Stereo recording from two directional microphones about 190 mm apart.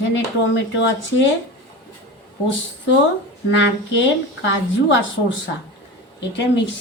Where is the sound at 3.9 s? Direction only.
75° left (ahead or behind).